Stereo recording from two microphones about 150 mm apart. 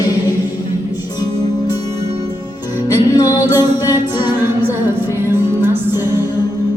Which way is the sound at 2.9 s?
25° left (ahead or behind).